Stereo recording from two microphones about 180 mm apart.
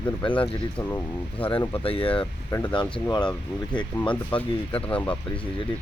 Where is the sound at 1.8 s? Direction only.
30° left (ahead or behind).